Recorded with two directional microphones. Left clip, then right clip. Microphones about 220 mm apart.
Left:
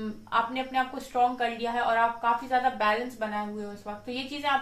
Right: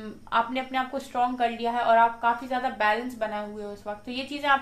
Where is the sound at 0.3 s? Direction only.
50° right (ahead or behind).